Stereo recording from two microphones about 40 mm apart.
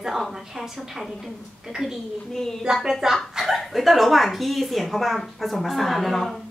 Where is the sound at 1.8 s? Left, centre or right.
Centre.